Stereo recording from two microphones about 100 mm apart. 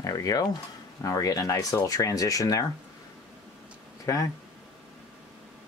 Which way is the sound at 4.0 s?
35° left (ahead or behind).